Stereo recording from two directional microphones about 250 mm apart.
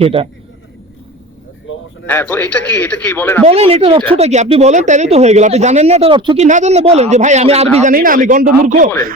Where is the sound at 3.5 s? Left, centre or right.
Right.